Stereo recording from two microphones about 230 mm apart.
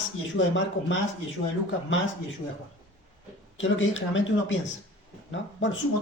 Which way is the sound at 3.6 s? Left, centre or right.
Left.